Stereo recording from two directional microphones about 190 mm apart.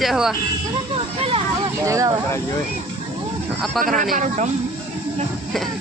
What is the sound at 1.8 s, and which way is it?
Speech, 15° right (ahead or behind).